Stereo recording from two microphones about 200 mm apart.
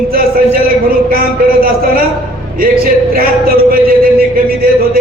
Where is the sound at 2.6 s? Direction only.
45° right (ahead or behind).